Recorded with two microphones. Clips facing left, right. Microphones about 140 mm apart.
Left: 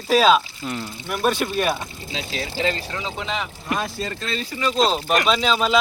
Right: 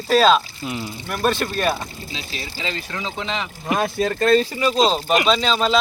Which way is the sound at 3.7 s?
60° right (ahead or behind).